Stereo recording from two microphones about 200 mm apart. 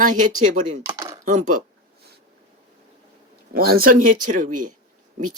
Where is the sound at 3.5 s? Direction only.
50° right (ahead or behind).